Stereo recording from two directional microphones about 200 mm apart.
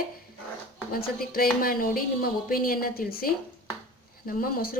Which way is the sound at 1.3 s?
45° left (ahead or behind).